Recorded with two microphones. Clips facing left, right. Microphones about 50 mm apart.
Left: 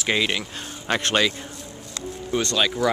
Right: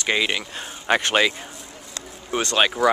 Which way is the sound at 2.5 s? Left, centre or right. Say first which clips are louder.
Right 4 dB; right.